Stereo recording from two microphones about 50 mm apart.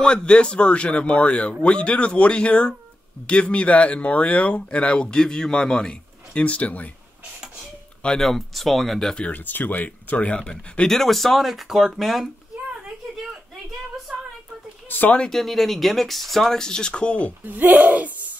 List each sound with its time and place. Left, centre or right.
0.0 s speech: centre
6.4 s speech: left
8.2 s speech: centre
9.3 s speech: left
10.9 s speech: centre
14.1 s a sound: centre
14.9 s speech: left
15.2 s speech: centre; by 17.3 s left
17.5 s speech: right